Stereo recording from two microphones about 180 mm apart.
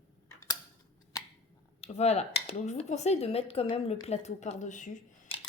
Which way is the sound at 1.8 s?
35° left (ahead or behind).